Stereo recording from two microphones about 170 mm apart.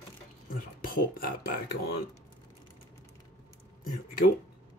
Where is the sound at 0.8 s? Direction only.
60° left (ahead or behind).